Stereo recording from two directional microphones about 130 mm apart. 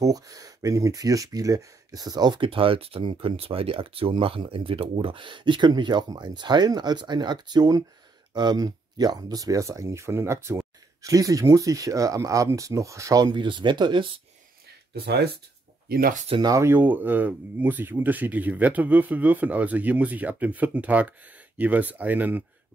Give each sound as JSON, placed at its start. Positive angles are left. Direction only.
{"t": 0.0, "sound": "speech", "side_deg": -30}
{"t": 16.3, "sound": "speech", "side_deg": -25}